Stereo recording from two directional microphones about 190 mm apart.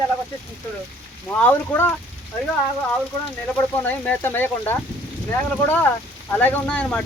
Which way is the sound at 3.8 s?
10° left (ahead or behind).